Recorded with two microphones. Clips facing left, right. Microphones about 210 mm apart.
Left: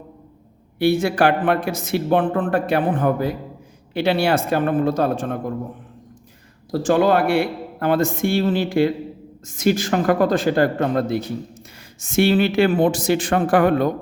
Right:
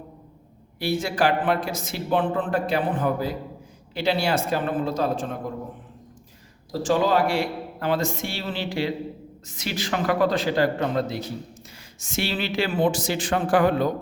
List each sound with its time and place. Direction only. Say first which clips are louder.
0.8 s speech: left 6 dB; 60° left (ahead or behind)
6.7 s a man's voice: left 5 dB; 60° left (ahead or behind)